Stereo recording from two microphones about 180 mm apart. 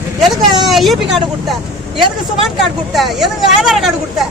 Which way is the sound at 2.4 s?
Centre (ahead or behind).